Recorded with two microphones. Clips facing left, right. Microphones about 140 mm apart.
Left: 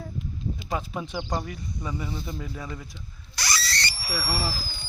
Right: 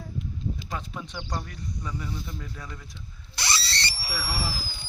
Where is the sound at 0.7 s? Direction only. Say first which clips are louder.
Left 5 dB; 10° left (ahead or behind).